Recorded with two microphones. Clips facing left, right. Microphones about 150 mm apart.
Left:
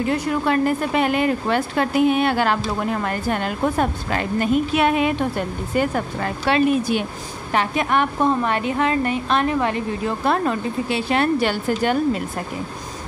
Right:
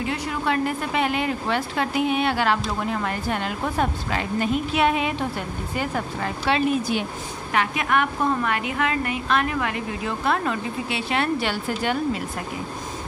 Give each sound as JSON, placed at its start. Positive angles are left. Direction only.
{"t": 0.0, "sound": "speech", "side_deg": 45}
{"t": 7.5, "sound": "a woman's voice", "side_deg": 35}